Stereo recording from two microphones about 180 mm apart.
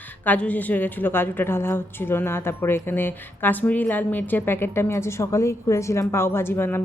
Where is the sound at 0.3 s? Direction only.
10° left (ahead or behind).